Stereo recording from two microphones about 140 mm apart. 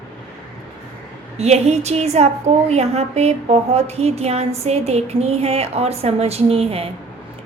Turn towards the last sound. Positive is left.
turn(degrees=-45)  # may be behind; listen again after turning